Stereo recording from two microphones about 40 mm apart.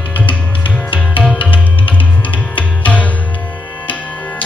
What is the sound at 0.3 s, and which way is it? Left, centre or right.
Music, left.